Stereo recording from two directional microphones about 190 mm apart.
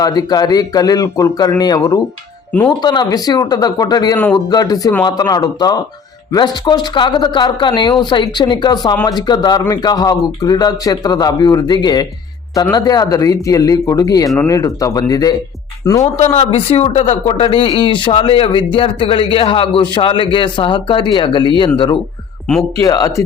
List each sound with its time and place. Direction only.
0.0 s speech: 20° left (ahead or behind)
16.3 s speech: 30° left (ahead or behind)
22.8 s speech: 15° left (ahead or behind)